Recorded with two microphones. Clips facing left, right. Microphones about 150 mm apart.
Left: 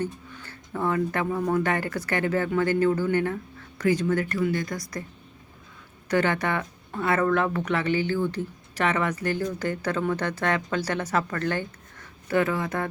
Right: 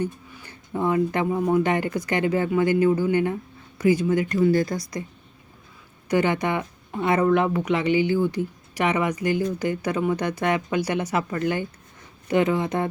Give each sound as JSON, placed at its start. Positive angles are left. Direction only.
{"t": 0.0, "sound": "speech", "side_deg": -15}
{"t": 4.4, "sound": "speech", "side_deg": -35}
{"t": 6.1, "sound": "speech", "side_deg": -15}